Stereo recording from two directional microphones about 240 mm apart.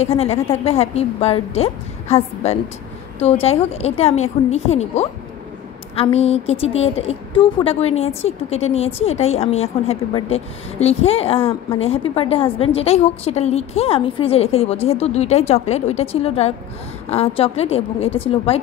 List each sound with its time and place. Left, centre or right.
0.0 s a woman's voice: left